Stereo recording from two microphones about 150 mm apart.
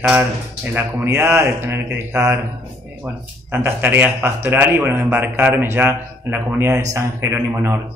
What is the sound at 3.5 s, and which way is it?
A man's voice, 15° right (ahead or behind).